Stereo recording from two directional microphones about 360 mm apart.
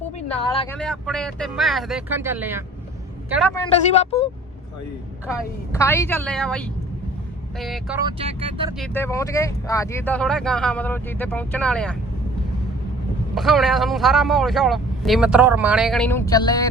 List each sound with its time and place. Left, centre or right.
0.5 s speech: centre
0.8 s speech: centre
3.7 s speech: centre
5.7 s speech: centre
8.8 s speech: centre
13.3 s speech: centre